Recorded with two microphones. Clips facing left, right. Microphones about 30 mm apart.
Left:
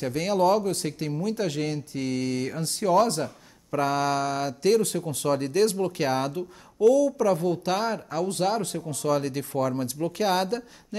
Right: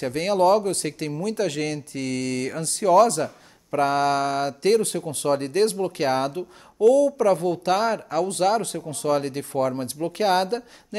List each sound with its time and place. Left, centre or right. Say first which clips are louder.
0.0 s speech: right 3 dB; right
3.7 s speech: right 4 dB; right
6.8 s speech: right 3 dB; right
9.0 s speech: right 2 dB; right